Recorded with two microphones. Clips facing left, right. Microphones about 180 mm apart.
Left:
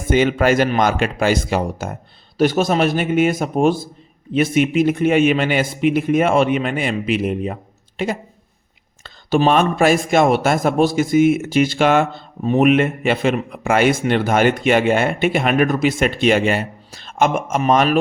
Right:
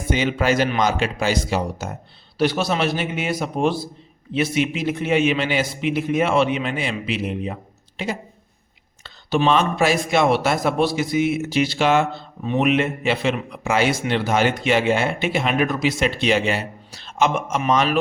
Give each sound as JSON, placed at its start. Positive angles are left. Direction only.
{"t": 0.1, "sound": "speech", "side_deg": 50}